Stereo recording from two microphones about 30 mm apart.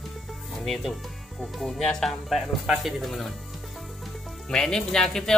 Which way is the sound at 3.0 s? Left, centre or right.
Centre.